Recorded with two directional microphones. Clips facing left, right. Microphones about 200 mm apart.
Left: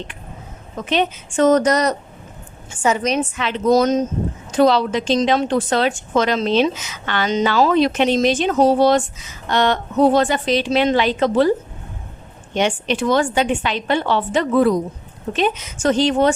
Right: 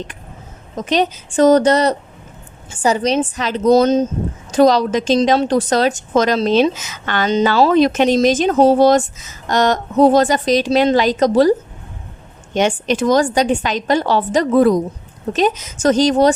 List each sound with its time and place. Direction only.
0.8 s speech: 40° right (ahead or behind)
4.5 s speech: 40° right (ahead or behind)
7.3 s speech: 35° right (ahead or behind)
12.5 s speech: 45° right (ahead or behind)